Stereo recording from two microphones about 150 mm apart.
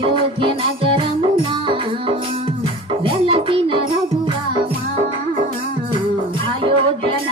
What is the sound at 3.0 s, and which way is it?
Music, 35° right (ahead or behind).